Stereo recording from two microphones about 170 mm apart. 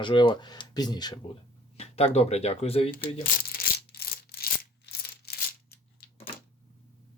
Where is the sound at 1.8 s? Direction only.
40° left (ahead or behind).